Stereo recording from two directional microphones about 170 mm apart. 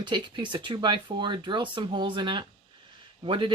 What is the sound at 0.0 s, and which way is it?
Speech, 25° right (ahead or behind).